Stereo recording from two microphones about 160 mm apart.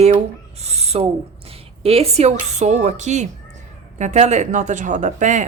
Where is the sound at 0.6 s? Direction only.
40° right (ahead or behind).